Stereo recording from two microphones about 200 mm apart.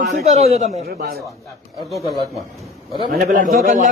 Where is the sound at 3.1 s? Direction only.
45° right (ahead or behind).